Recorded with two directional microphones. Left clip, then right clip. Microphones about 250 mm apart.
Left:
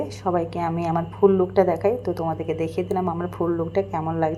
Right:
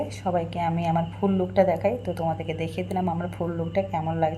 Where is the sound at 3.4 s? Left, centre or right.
Left.